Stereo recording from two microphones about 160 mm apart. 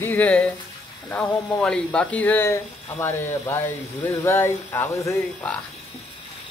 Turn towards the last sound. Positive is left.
turn(degrees=15)  # may be behind; listen again after turning